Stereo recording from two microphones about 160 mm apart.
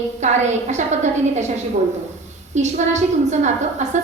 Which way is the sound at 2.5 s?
45° right (ahead or behind).